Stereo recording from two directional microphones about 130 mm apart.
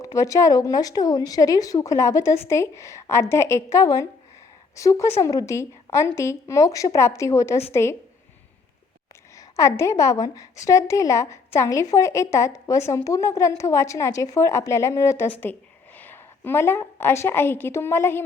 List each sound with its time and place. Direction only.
0.0 s a woman's voice: 25° left (ahead or behind)
9.3 s a woman's voice: 25° left (ahead or behind)